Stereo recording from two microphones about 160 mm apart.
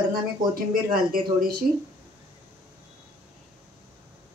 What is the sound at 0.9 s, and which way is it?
Speech, 65° right (ahead or behind).